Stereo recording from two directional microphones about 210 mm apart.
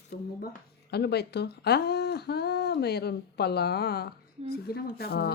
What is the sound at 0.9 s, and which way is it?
Speech, 50° left (ahead or behind).